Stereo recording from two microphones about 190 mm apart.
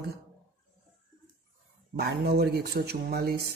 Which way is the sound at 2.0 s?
55° right (ahead or behind).